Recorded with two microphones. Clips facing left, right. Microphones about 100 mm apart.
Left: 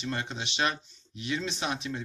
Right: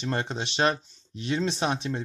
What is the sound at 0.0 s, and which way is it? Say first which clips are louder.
Speech: right 4 dB; 35° right (ahead or behind).